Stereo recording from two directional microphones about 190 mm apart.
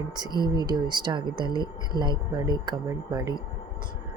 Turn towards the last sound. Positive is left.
turn(degrees=-20)  # may be behind; listen again after turning